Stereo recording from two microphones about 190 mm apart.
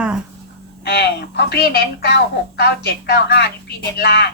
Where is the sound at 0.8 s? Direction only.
60° left (ahead or behind).